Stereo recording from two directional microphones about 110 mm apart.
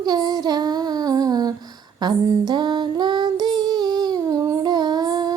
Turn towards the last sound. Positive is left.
turn(degrees=-40)  # may be behind; listen again after turning